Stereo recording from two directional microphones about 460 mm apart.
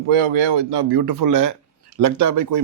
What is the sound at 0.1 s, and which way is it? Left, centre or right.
A man's voice, right.